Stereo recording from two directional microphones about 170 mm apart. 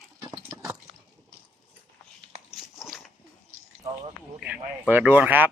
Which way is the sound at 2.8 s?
Centre (ahead or behind).